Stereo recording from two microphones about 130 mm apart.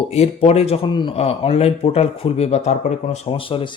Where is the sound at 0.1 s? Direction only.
50° left (ahead or behind).